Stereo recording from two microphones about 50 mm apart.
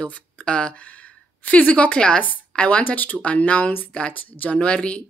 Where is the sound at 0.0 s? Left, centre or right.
Left.